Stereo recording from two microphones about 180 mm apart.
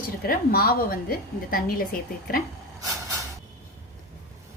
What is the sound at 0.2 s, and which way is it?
A woman's voice, 55° left (ahead or behind).